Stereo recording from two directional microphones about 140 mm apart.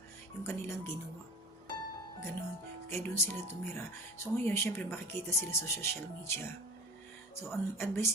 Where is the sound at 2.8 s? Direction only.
15° left (ahead or behind).